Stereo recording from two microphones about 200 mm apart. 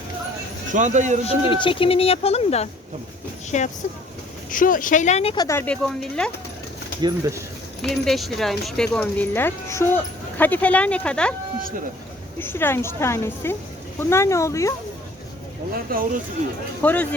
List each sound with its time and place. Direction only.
0.7 s speech: 40° right (ahead or behind)
1.5 s speech: 25° left (ahead or behind); by 6.3 s 5° left (ahead or behind)
7.0 s speech: 15° right (ahead or behind)
7.8 s speech: centre (ahead or behind)
12.4 s speech: 10° left (ahead or behind)
15.7 s speech: 45° right (ahead or behind)
16.8 s speech: 10° left (ahead or behind)